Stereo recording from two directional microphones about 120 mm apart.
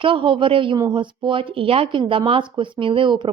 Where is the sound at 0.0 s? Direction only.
45° right (ahead or behind).